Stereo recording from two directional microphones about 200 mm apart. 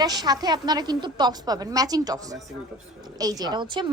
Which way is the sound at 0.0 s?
20° right (ahead or behind).